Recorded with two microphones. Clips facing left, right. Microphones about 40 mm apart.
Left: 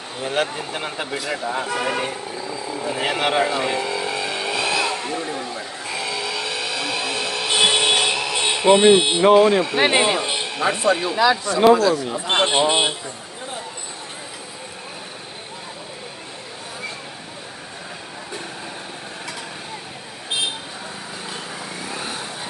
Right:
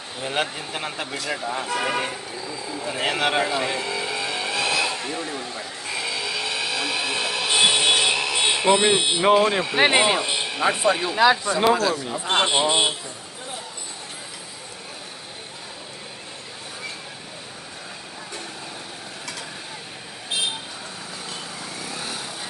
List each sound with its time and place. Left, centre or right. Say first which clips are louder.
0.2 s speech: left 3 dB; centre
2.9 s vehicle: left 1 dB; centre
8.7 s speech: left 6 dB; centre
9.2 s speech: left 2 dB; centre
10.2 s music: left 1 dB; centre
10.8 s speech: left 4 dB; centre
11.1 s speech: even; centre
11.6 s speech: left 7 dB; centre
12.1 s speech: left 2 dB; centre
21.8 s vehicle: left 3 dB; left